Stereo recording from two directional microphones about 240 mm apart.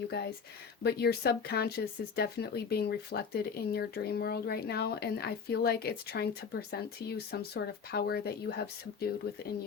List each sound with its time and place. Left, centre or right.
0.8 s speech: left